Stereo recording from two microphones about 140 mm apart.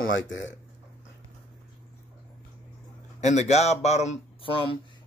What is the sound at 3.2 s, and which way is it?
A man's voice, 55° left (ahead or behind).